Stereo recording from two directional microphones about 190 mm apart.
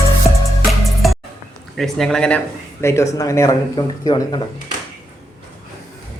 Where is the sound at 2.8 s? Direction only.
15° left (ahead or behind).